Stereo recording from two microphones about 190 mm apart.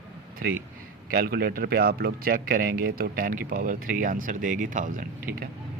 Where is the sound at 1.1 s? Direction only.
50° right (ahead or behind).